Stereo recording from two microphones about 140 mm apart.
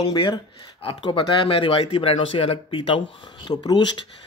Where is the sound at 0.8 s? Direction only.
35° left (ahead or behind).